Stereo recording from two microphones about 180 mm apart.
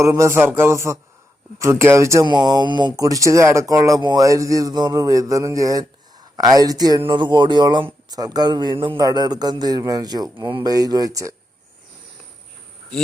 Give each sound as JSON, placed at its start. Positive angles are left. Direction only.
{"t": 0.0, "sound": "a man's voice", "side_deg": -15}